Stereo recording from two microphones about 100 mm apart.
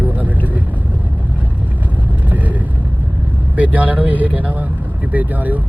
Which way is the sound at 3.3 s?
15° right (ahead or behind).